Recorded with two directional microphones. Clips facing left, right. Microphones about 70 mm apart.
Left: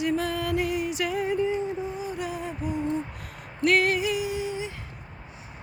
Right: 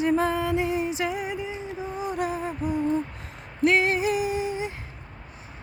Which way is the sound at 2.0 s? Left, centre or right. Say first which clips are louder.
Right 4 dB; right.